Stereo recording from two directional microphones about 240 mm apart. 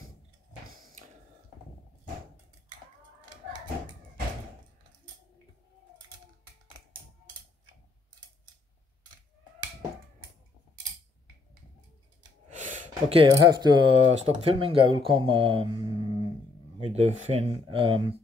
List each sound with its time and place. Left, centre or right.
12.4 s speech: right